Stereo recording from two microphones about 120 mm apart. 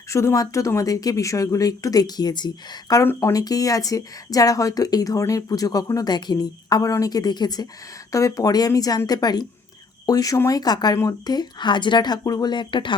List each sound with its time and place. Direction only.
0.1 s speech: 25° left (ahead or behind)
3.0 s speech: 20° left (ahead or behind); by 13.0 s 40° left (ahead or behind)